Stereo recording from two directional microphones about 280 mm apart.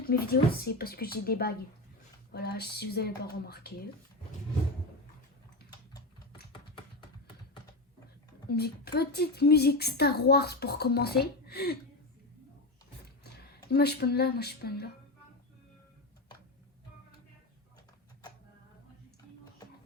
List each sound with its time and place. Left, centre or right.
0.0 s a woman's voice: left
8.4 s a woman's voice: left
13.2 s speech: left